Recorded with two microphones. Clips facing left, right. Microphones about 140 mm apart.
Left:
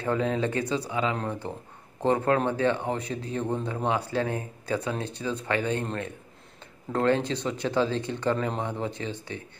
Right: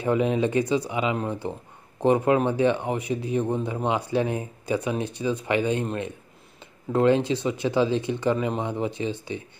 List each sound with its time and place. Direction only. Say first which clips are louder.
0.0 s speech: right 4 dB; 15° right (ahead or behind)